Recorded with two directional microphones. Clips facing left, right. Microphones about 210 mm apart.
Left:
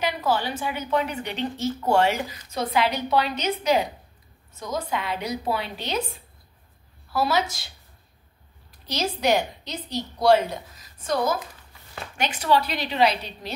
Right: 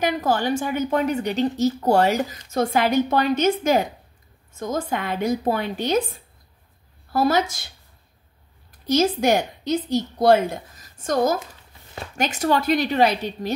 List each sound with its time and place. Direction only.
0.0 s a woman's voice: 50° right (ahead or behind)
8.8 s a woman's voice: 50° right (ahead or behind)